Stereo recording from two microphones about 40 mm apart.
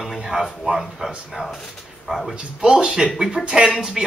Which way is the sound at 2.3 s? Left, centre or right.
Centre.